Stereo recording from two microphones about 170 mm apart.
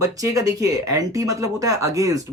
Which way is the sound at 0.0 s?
20° right (ahead or behind).